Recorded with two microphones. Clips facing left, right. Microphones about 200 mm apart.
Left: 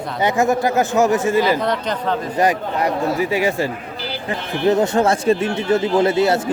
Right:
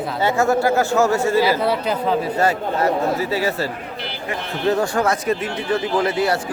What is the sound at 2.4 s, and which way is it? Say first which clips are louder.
Speech: left 3 dB; 15° left (ahead or behind).